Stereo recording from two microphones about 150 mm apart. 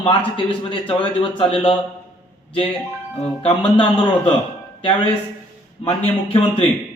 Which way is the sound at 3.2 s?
40° left (ahead or behind).